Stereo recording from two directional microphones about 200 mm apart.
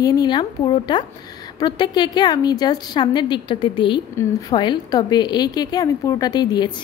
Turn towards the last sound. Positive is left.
turn(degrees=20)  # may be behind; listen again after turning